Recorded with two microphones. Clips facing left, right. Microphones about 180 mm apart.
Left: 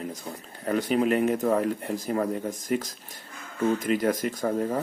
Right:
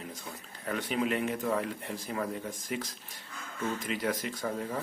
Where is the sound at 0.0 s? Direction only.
40° left (ahead or behind).